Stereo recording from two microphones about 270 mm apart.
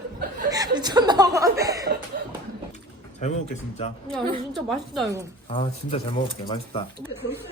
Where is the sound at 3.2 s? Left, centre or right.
Left.